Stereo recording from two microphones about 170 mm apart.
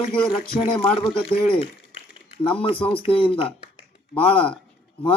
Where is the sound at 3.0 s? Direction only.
30° left (ahead or behind).